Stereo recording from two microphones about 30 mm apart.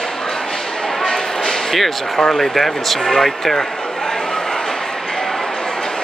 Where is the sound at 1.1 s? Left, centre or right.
Centre.